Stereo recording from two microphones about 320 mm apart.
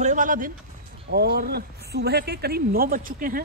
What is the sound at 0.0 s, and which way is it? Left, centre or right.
A man's voice, right.